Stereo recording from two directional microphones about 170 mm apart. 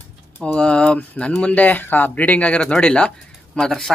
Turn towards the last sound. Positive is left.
turn(degrees=5)  # may be behind; listen again after turning